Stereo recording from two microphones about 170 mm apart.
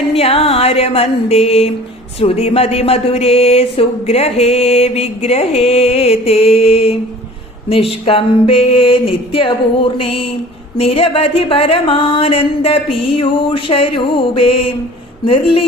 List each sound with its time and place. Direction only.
0.1 s speech: 35° left (ahead or behind)